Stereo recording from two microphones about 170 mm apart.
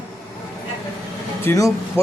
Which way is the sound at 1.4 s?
15° left (ahead or behind).